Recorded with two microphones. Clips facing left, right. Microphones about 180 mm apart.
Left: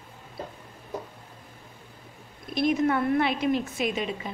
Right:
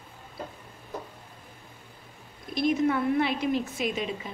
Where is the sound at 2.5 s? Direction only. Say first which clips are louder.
Left 1 dB; 65° left (ahead or behind).